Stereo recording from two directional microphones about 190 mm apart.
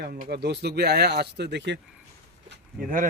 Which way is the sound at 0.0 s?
55° right (ahead or behind).